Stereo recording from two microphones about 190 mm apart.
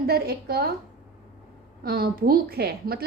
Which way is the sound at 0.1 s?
55° right (ahead or behind).